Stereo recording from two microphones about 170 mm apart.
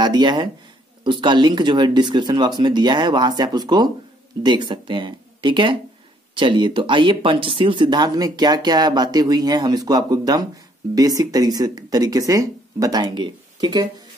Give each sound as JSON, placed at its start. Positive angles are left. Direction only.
{"t": 0.0, "sound": "speech", "side_deg": -25}